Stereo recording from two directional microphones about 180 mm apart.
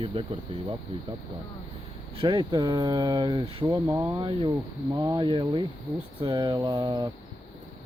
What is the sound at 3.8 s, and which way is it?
Speech, 15° right (ahead or behind).